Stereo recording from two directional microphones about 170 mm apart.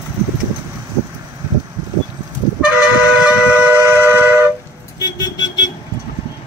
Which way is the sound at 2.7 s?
10° right (ahead or behind).